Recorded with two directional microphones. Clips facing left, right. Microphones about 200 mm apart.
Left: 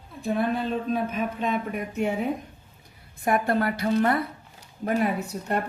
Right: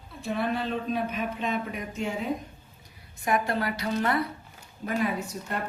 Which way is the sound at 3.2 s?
55° left (ahead or behind).